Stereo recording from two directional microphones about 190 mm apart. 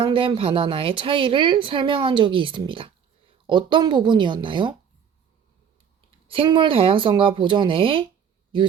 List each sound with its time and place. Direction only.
0.0 s speech: 25° right (ahead or behind)
6.2 s speech: 30° right (ahead or behind)